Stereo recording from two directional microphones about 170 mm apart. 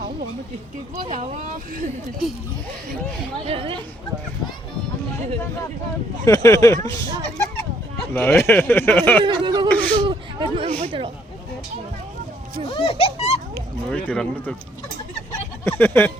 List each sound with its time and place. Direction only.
3.4 s speech: 35° right (ahead or behind)
6.2 s speech: 20° left (ahead or behind)
9.2 s speech: 25° right (ahead or behind)
9.6 s a sound: 10° left (ahead or behind)
10.0 s a sound: 30° right (ahead or behind)
12.7 s speech: 35° left (ahead or behind)
13.9 s speech: 10° left (ahead or behind)
15.6 s speech: 10° left (ahead or behind)